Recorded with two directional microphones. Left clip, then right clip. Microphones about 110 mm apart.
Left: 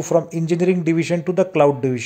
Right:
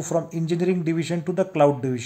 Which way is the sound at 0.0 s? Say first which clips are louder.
Left 7 dB; 30° left (ahead or behind).